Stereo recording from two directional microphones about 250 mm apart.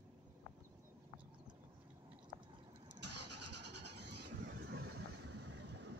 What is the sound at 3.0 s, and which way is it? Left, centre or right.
Vehicle, right.